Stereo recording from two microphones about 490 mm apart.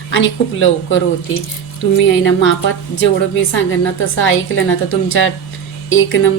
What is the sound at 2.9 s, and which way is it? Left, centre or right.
A woman's voice, left.